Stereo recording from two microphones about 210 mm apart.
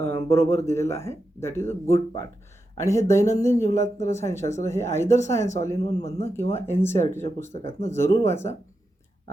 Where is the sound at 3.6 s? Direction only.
35° left (ahead or behind).